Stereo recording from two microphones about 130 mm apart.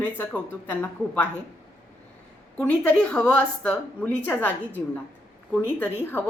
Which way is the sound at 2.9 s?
10° left (ahead or behind).